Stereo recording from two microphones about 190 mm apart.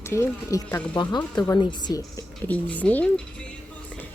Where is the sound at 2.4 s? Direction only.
10° left (ahead or behind).